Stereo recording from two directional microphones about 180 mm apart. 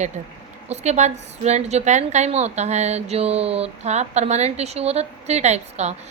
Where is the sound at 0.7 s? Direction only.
40° right (ahead or behind).